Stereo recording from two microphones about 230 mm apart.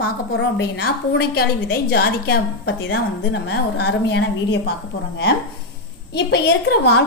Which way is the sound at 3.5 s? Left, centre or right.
Left.